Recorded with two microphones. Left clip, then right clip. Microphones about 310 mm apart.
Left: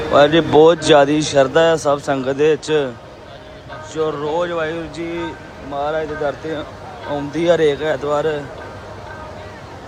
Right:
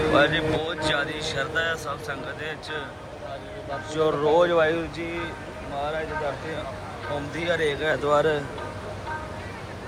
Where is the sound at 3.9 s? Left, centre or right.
Centre.